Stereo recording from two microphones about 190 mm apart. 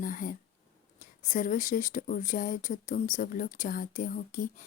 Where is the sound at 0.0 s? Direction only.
45° left (ahead or behind).